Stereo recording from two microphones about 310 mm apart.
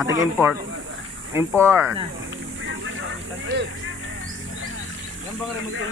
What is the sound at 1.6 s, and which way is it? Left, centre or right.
Speech, centre.